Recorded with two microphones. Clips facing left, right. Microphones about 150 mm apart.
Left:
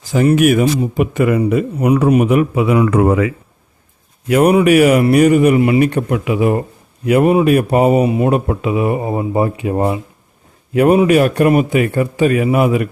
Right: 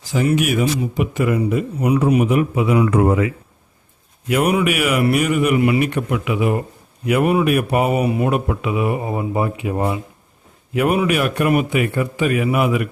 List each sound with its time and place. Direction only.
0.1 s a man's voice: 50° left (ahead or behind); by 3.3 s 90° left
4.3 s speech: 40° left (ahead or behind)